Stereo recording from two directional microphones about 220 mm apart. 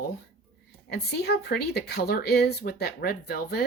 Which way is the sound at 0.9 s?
45° left (ahead or behind).